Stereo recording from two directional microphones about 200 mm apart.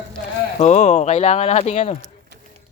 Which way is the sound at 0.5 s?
35° left (ahead or behind).